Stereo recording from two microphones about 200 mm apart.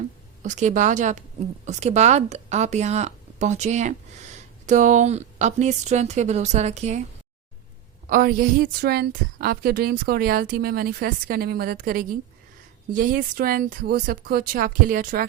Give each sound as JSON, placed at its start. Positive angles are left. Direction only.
{"t": 0.4, "sound": "speech", "side_deg": -35}
{"t": 8.0, "sound": "a woman's voice", "side_deg": -45}